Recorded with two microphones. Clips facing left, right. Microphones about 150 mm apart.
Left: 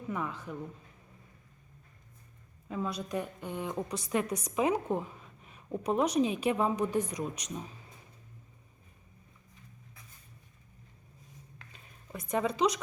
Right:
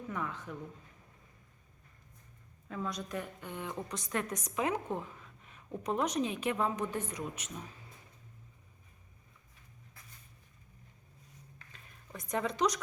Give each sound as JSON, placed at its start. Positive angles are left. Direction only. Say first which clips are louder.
{"t": 0.1, "sound": "a woman's voice", "louder": "left 4 dB", "side_deg": 15}
{"t": 2.6, "sound": "a woman's voice", "louder": "left 3 dB", "side_deg": 15}
{"t": 12.1, "sound": "a woman's voice", "louder": "left 4 dB", "side_deg": 10}